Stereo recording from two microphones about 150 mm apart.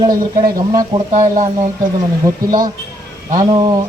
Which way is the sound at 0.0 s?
25° right (ahead or behind).